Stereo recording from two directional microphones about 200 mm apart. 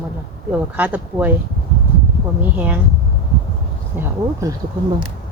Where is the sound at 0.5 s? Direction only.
10° right (ahead or behind).